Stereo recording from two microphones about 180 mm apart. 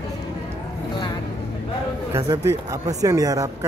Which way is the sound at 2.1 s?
15° right (ahead or behind).